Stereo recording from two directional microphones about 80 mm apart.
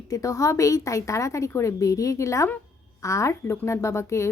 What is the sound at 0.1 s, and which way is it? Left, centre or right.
A woman's voice, left.